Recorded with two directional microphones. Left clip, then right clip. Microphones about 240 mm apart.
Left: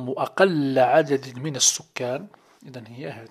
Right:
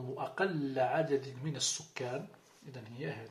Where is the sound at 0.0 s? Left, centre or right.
Left.